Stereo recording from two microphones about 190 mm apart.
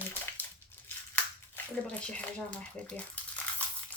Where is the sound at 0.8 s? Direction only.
10° left (ahead or behind).